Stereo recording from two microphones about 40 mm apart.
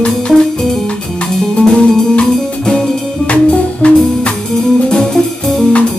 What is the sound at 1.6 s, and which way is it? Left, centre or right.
Music, left.